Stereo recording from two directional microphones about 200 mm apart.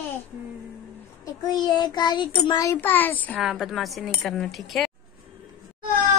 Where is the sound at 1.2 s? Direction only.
20° left (ahead or behind).